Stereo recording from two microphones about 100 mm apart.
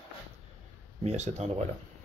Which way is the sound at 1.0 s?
90° right.